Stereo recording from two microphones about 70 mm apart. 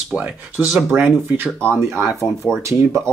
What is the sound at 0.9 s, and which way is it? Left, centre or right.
Speech, right.